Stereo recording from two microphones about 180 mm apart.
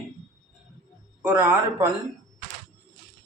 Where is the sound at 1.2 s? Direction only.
10° right (ahead or behind).